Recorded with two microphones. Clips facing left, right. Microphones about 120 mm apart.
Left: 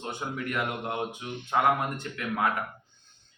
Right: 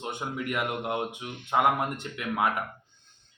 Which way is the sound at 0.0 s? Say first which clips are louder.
Right 1 dB; 20° right (ahead or behind).